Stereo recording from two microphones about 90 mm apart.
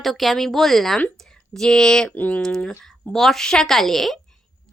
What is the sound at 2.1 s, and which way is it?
Speech, 20° left (ahead or behind).